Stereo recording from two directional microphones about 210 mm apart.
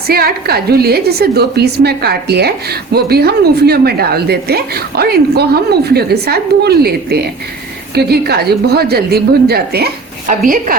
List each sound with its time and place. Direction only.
0.1 s a woman's voice: 45° right (ahead or behind)